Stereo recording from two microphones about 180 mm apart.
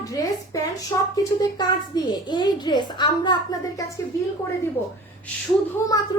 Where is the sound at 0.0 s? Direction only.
20° left (ahead or behind).